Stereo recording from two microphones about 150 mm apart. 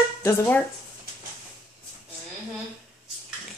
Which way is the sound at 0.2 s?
15° left (ahead or behind).